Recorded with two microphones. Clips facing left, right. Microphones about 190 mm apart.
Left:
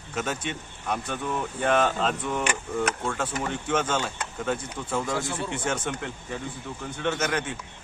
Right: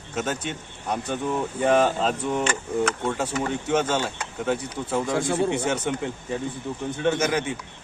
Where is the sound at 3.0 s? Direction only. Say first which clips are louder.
Right 3 dB; 25° right (ahead or behind).